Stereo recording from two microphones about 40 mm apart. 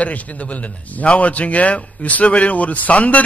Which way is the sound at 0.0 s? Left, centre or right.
Left.